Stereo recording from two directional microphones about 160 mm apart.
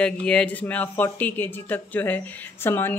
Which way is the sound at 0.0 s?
5° left (ahead or behind).